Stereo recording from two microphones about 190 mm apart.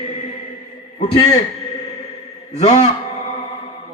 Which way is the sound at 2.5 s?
35° left (ahead or behind).